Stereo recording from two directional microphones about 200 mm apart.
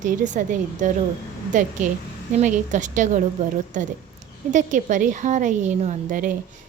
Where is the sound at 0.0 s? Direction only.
40° right (ahead or behind).